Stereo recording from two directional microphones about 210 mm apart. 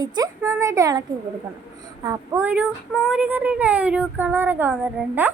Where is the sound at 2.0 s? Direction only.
10° right (ahead or behind).